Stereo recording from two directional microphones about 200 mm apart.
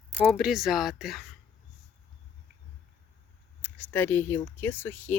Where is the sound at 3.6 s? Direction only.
5° left (ahead or behind).